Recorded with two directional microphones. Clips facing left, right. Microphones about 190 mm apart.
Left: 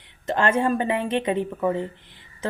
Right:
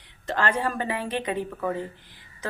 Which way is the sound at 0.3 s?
20° left (ahead or behind).